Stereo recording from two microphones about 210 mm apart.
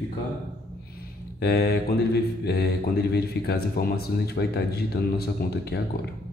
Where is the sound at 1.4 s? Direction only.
50° left (ahead or behind).